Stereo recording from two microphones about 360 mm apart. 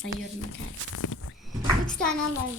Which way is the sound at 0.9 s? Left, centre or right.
Left.